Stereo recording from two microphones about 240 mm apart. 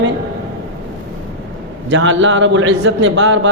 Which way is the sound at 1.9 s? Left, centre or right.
Right.